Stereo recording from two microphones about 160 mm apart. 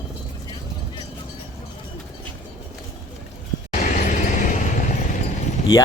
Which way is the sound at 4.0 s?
55° left (ahead or behind).